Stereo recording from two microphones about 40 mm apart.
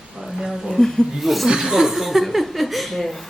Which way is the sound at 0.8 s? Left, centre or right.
Centre.